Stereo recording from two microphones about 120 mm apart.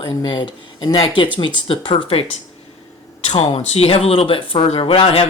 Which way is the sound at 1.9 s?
55° left (ahead or behind).